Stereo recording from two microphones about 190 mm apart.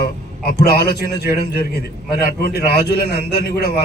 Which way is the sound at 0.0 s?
55° left (ahead or behind).